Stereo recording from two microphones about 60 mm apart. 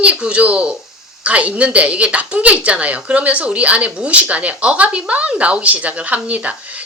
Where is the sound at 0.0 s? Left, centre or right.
Centre.